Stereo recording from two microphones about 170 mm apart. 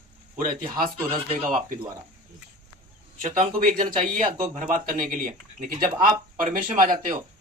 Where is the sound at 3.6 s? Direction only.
45° right (ahead or behind).